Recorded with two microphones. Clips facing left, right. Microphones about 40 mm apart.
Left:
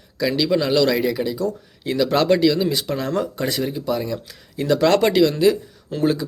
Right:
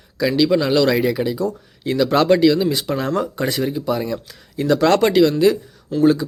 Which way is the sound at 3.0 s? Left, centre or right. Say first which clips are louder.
Right 2 dB; centre.